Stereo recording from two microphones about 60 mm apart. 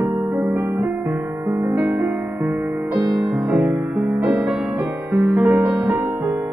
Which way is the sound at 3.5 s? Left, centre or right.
Right.